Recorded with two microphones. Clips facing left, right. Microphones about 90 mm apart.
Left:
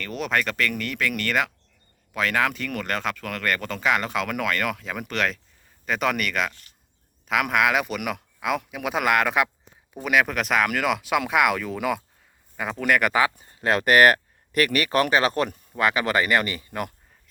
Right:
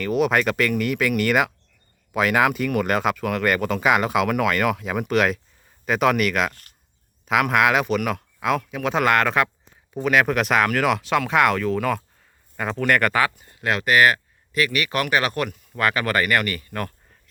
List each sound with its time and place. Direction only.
0.0 s speech: 5° right (ahead or behind)
6.5 s speech: 50° right (ahead or behind)
7.3 s speech: centre (ahead or behind)
13.2 s speech: 25° left (ahead or behind)
15.8 s speech: 20° left (ahead or behind)